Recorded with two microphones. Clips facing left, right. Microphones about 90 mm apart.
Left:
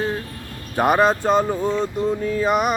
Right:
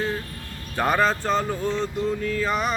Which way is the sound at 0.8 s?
15° left (ahead or behind).